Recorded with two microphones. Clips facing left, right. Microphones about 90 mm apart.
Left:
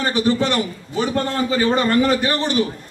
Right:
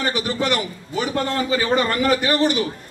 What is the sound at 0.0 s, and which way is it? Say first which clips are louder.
A man's voice: left 4 dB; 35° left (ahead or behind).